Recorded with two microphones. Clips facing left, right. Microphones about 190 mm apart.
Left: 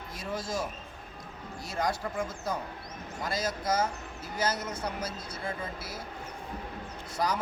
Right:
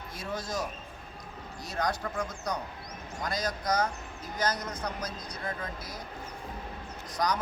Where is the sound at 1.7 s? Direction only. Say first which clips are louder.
Even; 5° left (ahead or behind).